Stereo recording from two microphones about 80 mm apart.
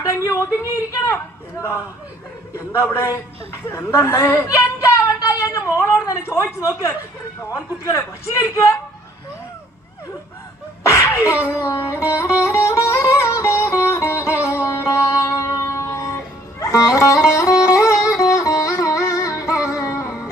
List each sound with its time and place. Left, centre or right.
0.1 s a sound: left
0.7 s speech: left
2.6 s a woman's voice: left
10.8 s sneeze: left
12.1 s speech: left
12.6 s music: left